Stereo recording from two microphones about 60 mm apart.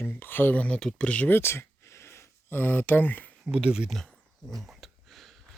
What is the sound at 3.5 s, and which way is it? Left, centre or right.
Speech, centre.